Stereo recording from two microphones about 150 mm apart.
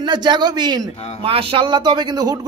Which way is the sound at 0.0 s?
30° right (ahead or behind).